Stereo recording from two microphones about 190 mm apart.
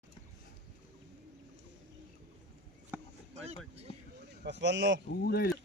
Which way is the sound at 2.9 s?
10° right (ahead or behind).